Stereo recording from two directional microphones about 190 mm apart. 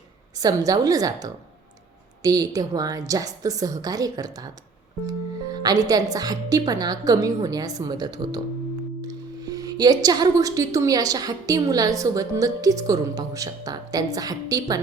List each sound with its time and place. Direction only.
0.3 s speech: 20° right (ahead or behind)